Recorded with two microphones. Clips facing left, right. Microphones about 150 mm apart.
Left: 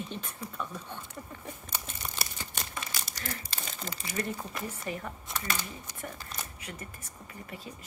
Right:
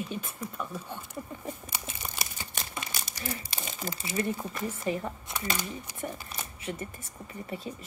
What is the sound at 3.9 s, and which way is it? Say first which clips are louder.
Speech: right 4 dB; 25° right (ahead or behind).